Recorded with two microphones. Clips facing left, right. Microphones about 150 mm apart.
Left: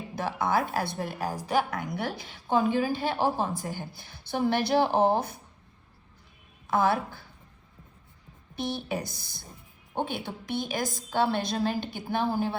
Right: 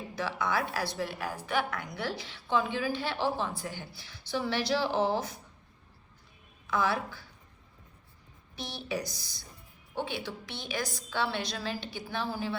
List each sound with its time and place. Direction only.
0.2 s a woman's voice: 50° left (ahead or behind)
6.7 s a woman's voice: 50° left (ahead or behind)
8.5 s a woman's voice: 55° left (ahead or behind)